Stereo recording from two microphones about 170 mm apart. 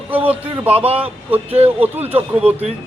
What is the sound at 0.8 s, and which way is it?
A man's voice, 35° right (ahead or behind).